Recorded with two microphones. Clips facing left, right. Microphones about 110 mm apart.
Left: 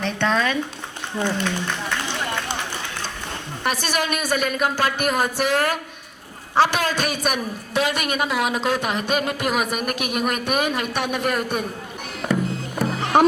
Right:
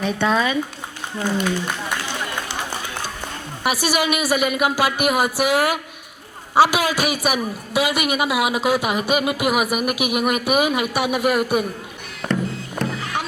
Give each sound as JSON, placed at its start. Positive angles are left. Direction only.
{"t": 0.0, "sound": "a woman's voice", "side_deg": -10}
{"t": 3.6, "sound": "a woman's voice", "side_deg": -10}
{"t": 12.2, "sound": "music", "side_deg": 0}
{"t": 12.9, "sound": "music", "side_deg": 35}